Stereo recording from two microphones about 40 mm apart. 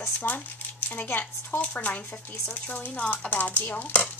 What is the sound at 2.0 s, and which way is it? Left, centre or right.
Dishes, left.